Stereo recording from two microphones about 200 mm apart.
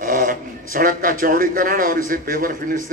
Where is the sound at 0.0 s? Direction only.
40° right (ahead or behind).